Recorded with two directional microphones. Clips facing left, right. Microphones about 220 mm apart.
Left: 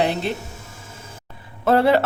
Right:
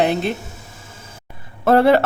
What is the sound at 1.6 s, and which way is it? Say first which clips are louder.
Speech: right 3 dB; 55° right (ahead or behind).